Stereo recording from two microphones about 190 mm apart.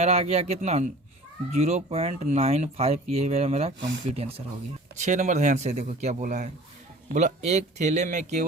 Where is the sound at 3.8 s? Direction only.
70° right (ahead or behind).